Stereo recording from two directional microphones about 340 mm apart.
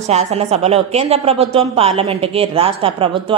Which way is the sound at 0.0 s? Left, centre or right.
Centre.